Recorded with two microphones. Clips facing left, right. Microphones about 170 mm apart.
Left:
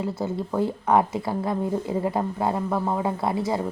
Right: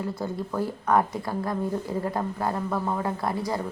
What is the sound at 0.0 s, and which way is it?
Speech, 20° left (ahead or behind).